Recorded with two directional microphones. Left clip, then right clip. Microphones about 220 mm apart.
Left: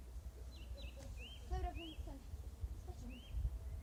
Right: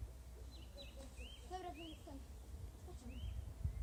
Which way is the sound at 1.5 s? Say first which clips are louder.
Right 1 dB; 5° right (ahead or behind).